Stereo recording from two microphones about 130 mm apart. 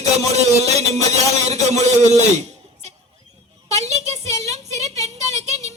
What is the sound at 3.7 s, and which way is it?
Child singing, 55° right (ahead or behind).